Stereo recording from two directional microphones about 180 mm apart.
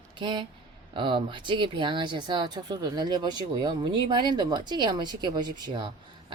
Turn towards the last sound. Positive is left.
turn(degrees=-25)  # may be behind; listen again after turning